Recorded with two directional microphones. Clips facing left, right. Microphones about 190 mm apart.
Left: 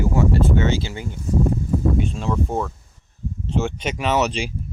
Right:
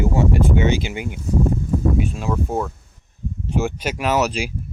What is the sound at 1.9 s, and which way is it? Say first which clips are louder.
Speech: even; 5° right (ahead or behind).